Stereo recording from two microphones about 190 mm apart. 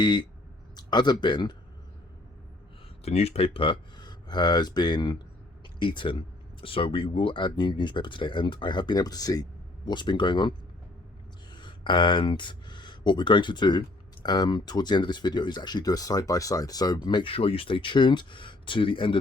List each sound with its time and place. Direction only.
0.0 s speech: 25° left (ahead or behind)
3.0 s speech: 30° left (ahead or behind)
11.5 s speech: 25° left (ahead or behind)